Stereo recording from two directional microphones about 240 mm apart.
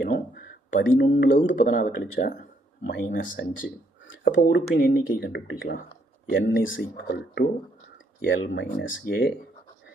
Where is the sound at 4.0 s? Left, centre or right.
Left.